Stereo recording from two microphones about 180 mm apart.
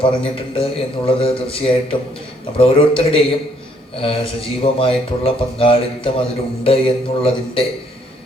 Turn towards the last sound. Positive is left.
turn(degrees=30)  # may be behind; listen again after turning